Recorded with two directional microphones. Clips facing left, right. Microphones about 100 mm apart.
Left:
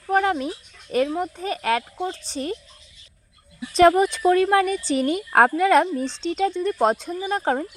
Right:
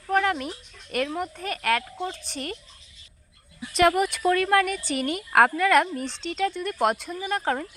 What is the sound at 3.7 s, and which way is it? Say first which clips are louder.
Speech: left 5 dB; 35° left (ahead or behind).